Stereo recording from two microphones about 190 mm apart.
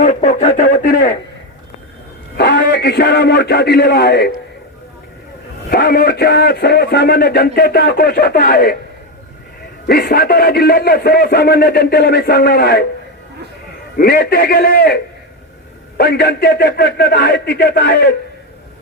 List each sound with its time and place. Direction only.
0.0 s speech: 40° left (ahead or behind)
2.4 s a man's voice: 55° left (ahead or behind)
5.7 s a man's voice: 55° left (ahead or behind)
9.8 s a man's voice: 55° left (ahead or behind)
13.9 s a man's voice: 55° left (ahead or behind)
16.0 s a man's voice: 55° left (ahead or behind)